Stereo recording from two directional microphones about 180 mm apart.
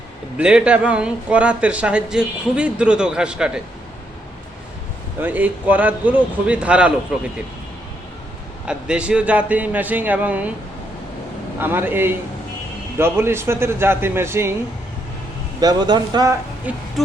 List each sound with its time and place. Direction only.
0.3 s speech: 5° right (ahead or behind)
5.2 s a man's voice: 10° right (ahead or behind)
8.6 s a man's voice: 5° right (ahead or behind)
11.6 s a man's voice: 10° right (ahead or behind)
15.6 s a man's voice: 25° right (ahead or behind)
16.7 s a man's voice: 10° right (ahead or behind)